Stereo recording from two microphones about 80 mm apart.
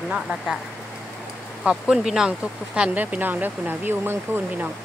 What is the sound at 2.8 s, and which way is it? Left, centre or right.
Speech, centre.